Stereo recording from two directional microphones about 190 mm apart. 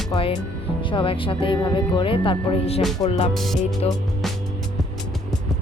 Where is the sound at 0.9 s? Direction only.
25° left (ahead or behind).